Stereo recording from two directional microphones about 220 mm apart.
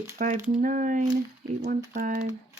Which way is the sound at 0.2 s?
35° right (ahead or behind).